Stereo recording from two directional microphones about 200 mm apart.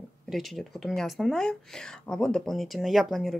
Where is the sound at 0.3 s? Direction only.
Centre (ahead or behind).